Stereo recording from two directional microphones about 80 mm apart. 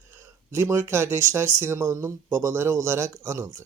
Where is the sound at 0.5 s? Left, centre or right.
Right.